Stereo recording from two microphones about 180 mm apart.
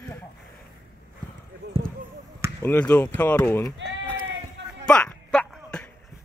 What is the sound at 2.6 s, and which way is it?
Speech, 10° left (ahead or behind).